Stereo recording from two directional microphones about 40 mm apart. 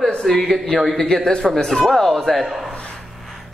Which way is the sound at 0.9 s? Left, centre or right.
Centre.